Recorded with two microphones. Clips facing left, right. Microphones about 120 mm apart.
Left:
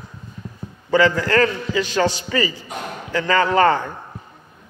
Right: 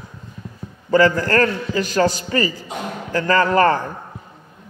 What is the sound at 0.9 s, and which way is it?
A man's voice, 45° right (ahead or behind).